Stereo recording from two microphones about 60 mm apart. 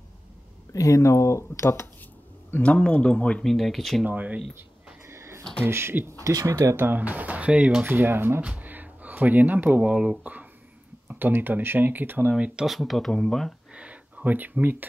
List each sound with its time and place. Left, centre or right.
0.7 s speech: left
2.6 s speech: centre
3.4 s speech: centre
4.0 s speech: right
5.1 s a sound: right
5.6 s speech: right
6.2 s speech: right
6.8 s speech: right
7.8 s speech: right
8.4 s speech: right
11.1 s speech: right
12.3 s speech: centre
12.6 s speech: centre
13.7 s a sound: right